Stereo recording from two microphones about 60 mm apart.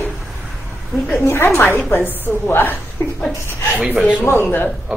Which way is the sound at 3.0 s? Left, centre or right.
Left.